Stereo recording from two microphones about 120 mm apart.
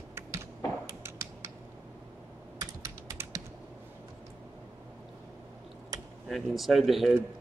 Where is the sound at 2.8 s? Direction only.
25° right (ahead or behind).